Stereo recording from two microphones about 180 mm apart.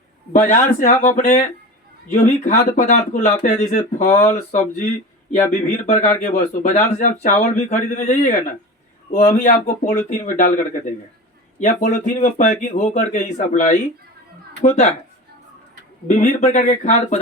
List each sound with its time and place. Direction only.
0.3 s speech: 45° left (ahead or behind)
16.0 s speech: 45° left (ahead or behind)